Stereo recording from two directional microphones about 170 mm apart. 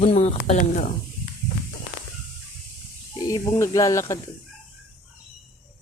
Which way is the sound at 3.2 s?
20° left (ahead or behind).